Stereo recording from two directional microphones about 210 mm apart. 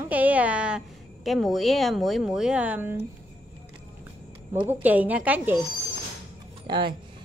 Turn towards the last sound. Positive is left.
turn(degrees=-20)  # may be behind; listen again after turning